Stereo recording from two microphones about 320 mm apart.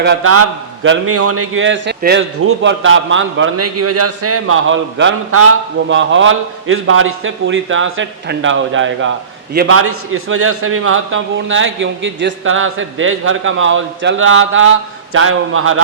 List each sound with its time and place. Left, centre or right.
0.0 s a man's voice: right